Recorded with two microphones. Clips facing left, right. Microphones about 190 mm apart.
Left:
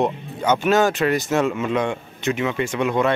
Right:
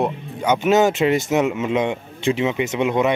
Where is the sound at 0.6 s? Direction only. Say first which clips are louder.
Right 3 dB; 20° right (ahead or behind).